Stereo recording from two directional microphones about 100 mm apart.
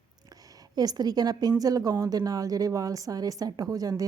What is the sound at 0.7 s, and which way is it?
A woman's voice, 40° right (ahead or behind).